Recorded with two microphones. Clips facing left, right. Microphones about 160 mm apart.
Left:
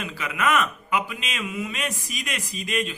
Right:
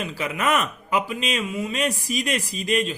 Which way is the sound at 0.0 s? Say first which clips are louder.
Right 1 dB; 35° right (ahead or behind).